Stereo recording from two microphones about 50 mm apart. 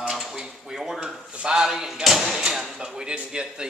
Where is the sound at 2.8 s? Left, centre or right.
Centre.